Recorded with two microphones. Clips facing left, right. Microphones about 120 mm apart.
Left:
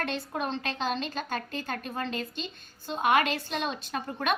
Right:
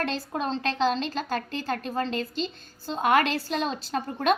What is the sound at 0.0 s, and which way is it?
A woman's voice, 30° right (ahead or behind).